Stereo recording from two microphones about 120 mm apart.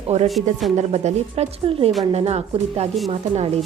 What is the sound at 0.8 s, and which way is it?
Speech, 70° right (ahead or behind).